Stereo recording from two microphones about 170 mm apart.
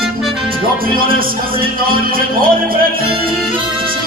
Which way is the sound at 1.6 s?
60° right (ahead or behind).